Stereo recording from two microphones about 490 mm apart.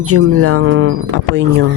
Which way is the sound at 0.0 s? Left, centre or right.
Right.